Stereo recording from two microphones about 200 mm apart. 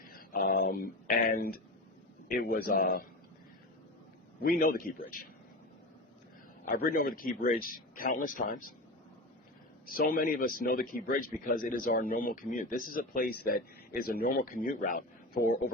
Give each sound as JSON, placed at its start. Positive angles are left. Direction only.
{"t": 0.1, "sound": "speech", "side_deg": 45}
{"t": 4.4, "sound": "speech", "side_deg": 45}
{"t": 6.7, "sound": "speech", "side_deg": 45}
{"t": 9.8, "sound": "speech", "side_deg": 45}